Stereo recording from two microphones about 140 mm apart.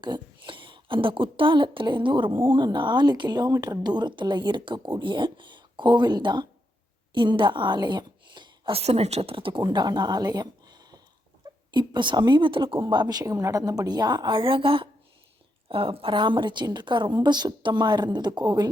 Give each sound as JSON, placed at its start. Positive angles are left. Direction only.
{"t": 0.0, "sound": "a woman's voice", "side_deg": -35}